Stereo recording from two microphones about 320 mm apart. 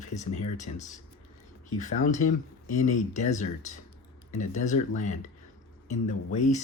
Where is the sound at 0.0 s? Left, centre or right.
Left.